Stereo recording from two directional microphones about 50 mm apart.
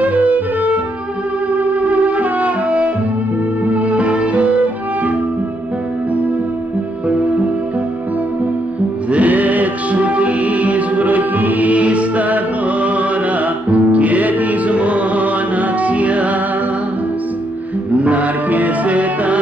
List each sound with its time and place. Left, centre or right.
0.0 s music: right
9.1 s music: right
13.7 s music: right
17.9 s music: right